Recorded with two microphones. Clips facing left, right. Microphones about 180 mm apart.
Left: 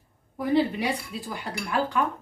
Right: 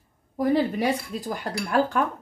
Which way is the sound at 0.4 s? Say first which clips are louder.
Right 2 dB; 40° right (ahead or behind).